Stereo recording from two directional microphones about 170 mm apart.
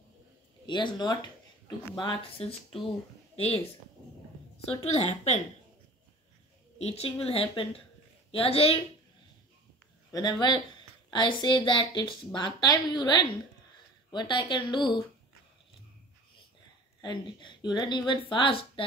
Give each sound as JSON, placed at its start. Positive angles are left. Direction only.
{"t": 0.7, "sound": "a woman's voice", "side_deg": 25}
{"t": 4.8, "sound": "a woman's voice", "side_deg": 40}
{"t": 6.8, "sound": "a woman's voice", "side_deg": 35}
{"t": 10.1, "sound": "a woman's voice", "side_deg": 25}
{"t": 17.0, "sound": "a woman's voice", "side_deg": 25}